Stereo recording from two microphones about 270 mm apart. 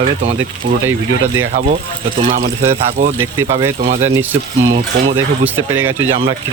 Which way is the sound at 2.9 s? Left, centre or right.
Right.